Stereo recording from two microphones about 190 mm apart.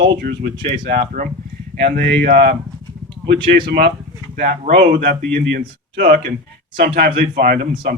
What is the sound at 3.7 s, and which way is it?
Speech, 65° right (ahead or behind).